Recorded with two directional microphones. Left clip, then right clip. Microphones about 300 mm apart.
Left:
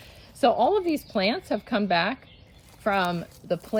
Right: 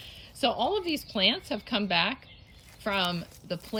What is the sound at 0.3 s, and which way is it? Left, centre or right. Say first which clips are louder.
Speech: left 6 dB; centre.